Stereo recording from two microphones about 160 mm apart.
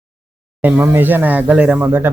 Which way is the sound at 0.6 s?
10° right (ahead or behind).